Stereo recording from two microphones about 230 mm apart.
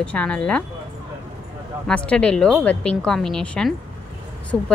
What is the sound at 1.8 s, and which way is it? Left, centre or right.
A woman's voice, centre.